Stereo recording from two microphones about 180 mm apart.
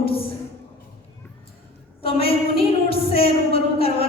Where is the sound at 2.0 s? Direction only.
30° left (ahead or behind).